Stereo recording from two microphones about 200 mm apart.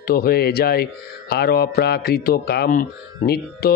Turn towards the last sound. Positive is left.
turn(degrees=50)  # may be behind; listen again after turning